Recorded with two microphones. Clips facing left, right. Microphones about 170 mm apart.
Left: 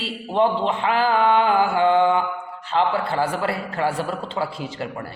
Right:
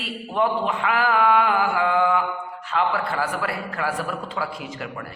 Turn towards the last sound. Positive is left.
turn(degrees=30)  # may be behind; listen again after turning